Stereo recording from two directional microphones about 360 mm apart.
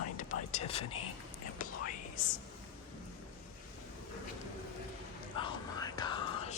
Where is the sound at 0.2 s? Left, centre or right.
Left.